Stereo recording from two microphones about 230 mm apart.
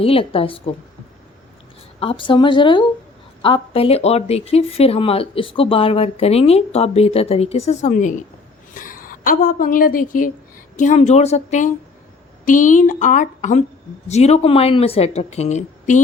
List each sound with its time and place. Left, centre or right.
0.0 s speech: left
2.0 s a woman's voice: left